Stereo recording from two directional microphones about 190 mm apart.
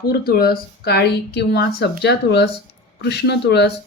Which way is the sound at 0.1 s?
55° left (ahead or behind).